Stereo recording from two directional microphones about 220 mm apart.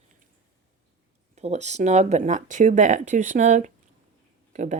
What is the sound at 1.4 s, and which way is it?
Speech, 30° right (ahead or behind).